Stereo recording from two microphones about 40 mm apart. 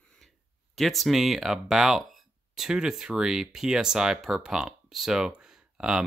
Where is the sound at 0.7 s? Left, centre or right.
Centre.